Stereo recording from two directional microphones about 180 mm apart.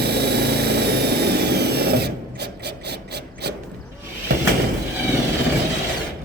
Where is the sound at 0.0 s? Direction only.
65° right (ahead or behind).